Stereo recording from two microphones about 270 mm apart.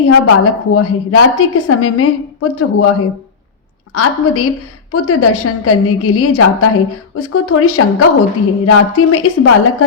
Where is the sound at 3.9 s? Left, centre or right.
Left.